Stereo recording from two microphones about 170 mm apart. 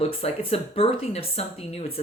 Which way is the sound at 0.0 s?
35° left (ahead or behind).